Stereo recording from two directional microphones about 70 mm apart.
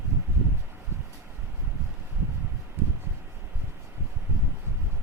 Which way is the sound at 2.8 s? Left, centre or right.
Right.